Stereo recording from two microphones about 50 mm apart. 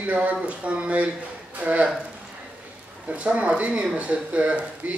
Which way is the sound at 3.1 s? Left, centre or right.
Right.